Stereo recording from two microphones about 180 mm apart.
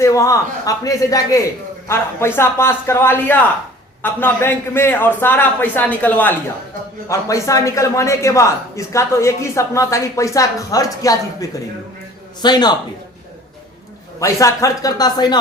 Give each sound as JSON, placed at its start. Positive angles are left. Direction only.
{"t": 0.0, "sound": "a man's voice", "side_deg": 15}
{"t": 14.2, "sound": "speech", "side_deg": 15}